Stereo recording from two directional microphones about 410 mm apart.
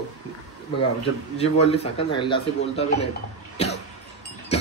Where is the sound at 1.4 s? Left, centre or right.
Centre.